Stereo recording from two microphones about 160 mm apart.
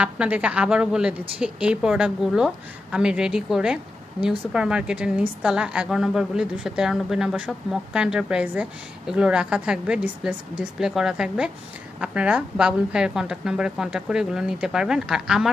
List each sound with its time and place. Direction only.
0.0 s a woman's voice: 10° right (ahead or behind)